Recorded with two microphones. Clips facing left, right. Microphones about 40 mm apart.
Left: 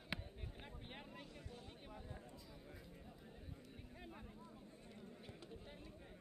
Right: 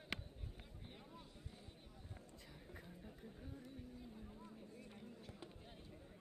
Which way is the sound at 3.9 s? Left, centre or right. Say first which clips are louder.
Even; left.